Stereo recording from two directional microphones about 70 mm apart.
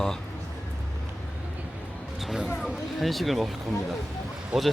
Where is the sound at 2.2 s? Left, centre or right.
Centre.